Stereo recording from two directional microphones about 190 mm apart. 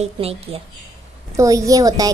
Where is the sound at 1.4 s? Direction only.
15° right (ahead or behind).